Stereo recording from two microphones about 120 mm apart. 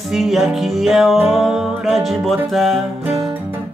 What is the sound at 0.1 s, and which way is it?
Speech, centre (ahead or behind).